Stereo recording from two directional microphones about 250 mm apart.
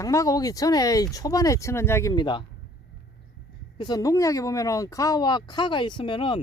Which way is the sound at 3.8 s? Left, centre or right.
Centre.